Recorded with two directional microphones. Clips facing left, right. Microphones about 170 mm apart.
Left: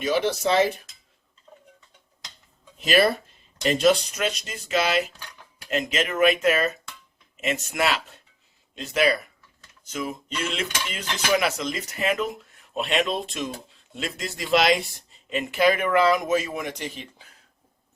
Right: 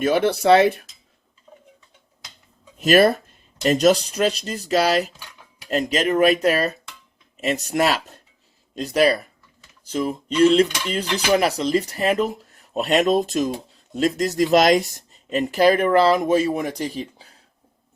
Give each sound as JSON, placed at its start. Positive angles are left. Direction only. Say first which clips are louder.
{"t": 0.0, "sound": "speech", "louder": "right 5 dB", "side_deg": -55}
{"t": 1.5, "sound": "tick-tock", "louder": "right 2 dB", "side_deg": -10}
{"t": 2.7, "sound": "speech", "louder": "right 5 dB", "side_deg": -50}
{"t": 5.0, "sound": "a sound", "louder": "right 2 dB", "side_deg": 0}
{"t": 5.6, "sound": "speech", "louder": "right 5 dB", "side_deg": -40}